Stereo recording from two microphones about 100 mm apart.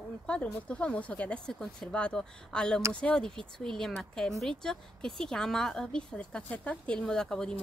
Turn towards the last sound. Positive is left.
turn(degrees=5)  # may be behind; listen again after turning